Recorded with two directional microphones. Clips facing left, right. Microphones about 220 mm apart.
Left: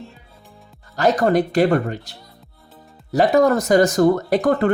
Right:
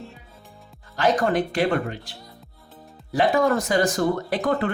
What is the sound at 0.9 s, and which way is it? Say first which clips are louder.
Speech: left 4 dB; 40° left (ahead or behind).